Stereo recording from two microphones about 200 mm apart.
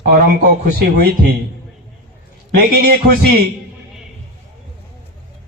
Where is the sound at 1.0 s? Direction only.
50° right (ahead or behind).